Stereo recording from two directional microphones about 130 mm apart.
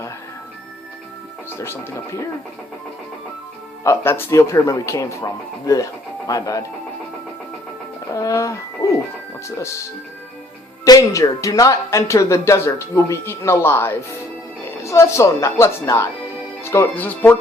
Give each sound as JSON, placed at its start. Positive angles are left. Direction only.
{"t": 1.5, "sound": "speech", "side_deg": 20}
{"t": 3.8, "sound": "speech", "side_deg": 20}
{"t": 8.1, "sound": "music", "side_deg": 25}
{"t": 9.6, "sound": "speech", "side_deg": 25}
{"t": 10.8, "sound": "speech", "side_deg": 25}